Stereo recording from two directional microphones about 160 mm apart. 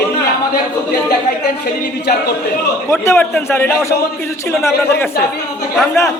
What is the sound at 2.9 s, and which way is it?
A man's voice, 15° left (ahead or behind).